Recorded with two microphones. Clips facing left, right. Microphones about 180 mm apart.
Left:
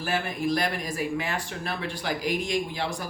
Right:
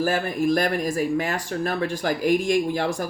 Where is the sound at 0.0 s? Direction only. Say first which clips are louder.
Right 6 dB; 45° right (ahead or behind).